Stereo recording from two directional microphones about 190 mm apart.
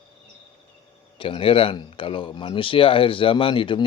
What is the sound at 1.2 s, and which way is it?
Speech, 30° left (ahead or behind).